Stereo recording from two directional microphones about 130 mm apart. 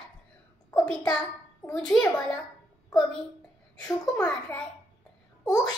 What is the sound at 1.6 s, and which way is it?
Speech, 5° left (ahead or behind).